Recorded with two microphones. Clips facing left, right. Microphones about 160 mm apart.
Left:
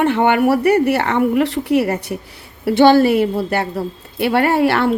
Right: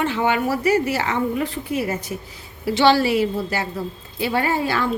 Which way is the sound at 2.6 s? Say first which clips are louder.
Left 6 dB; 55° left (ahead or behind).